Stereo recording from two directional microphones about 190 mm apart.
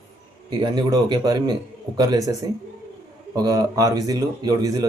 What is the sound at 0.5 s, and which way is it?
Speech, 20° right (ahead or behind).